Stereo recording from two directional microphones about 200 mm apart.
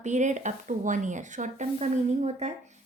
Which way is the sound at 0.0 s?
35° right (ahead or behind).